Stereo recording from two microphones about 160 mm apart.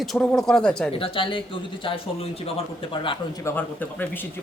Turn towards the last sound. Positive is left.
turn(degrees=10)  # may be behind; listen again after turning